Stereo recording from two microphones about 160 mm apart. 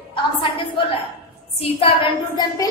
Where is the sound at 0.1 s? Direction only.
30° left (ahead or behind).